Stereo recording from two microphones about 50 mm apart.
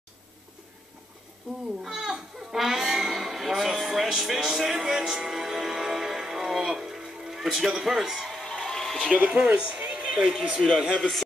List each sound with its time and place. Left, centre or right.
1.8 s speech: centre
8.3 s a sound: centre
9.1 s speech: right